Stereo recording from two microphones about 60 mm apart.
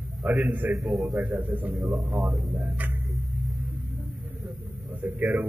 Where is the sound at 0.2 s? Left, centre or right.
Centre.